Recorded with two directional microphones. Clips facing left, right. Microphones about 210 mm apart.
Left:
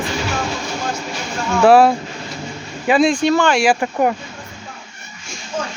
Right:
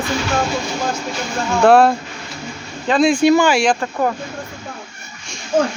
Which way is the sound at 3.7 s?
15° left (ahead or behind).